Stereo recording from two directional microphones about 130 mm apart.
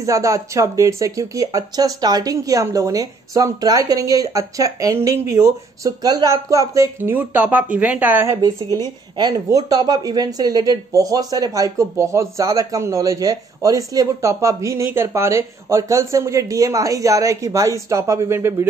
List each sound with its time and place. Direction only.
0.0 s speech: 25° right (ahead or behind)
7.2 s speech: 10° right (ahead or behind)
9.1 s speech: 30° right (ahead or behind)